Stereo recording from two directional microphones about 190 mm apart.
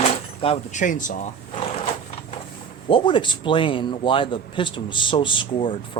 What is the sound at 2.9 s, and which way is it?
A man's voice, 25° left (ahead or behind).